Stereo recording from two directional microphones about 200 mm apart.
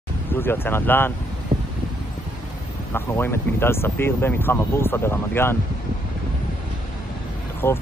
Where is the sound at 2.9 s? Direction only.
10° left (ahead or behind).